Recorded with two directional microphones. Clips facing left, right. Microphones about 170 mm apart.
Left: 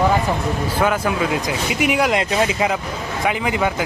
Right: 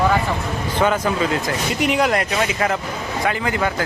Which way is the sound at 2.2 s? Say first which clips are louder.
Left 2 dB; 25° left (ahead or behind).